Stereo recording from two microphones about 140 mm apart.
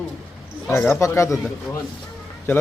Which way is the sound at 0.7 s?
15° left (ahead or behind).